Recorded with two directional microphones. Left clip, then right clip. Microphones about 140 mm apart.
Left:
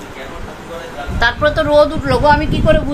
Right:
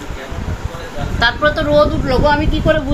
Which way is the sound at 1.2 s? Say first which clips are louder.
Even; 15° left (ahead or behind).